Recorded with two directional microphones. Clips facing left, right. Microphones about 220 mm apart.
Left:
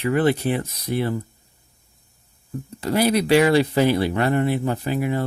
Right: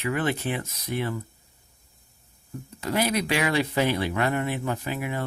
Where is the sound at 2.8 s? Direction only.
35° left (ahead or behind).